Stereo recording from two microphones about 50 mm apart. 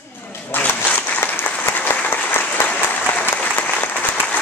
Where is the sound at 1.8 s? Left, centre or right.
Left.